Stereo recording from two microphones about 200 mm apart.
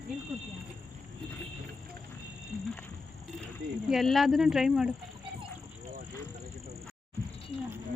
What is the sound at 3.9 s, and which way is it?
Speech, centre (ahead or behind).